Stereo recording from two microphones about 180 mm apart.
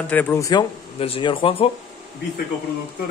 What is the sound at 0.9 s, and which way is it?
Speech, 30° left (ahead or behind).